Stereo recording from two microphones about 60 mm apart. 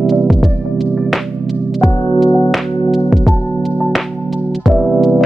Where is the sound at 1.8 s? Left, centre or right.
Centre.